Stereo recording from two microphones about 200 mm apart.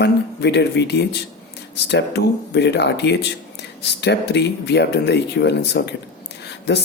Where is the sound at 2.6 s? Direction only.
60° left (ahead or behind).